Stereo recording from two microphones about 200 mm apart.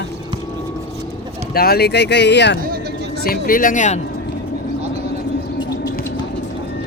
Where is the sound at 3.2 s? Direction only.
45° left (ahead or behind).